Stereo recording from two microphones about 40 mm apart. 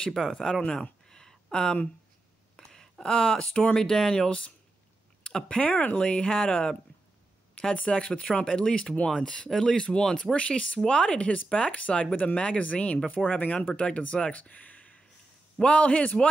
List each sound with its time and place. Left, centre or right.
0.1 s speech: centre
1.0 s a sound: centre
3.1 s speech: left
3.7 s speech: centre
4.3 s speech: left
5.6 s speech: left
5.9 s speech: left; by 9.8 s centre
9.8 s speech: left
13.7 s speech: left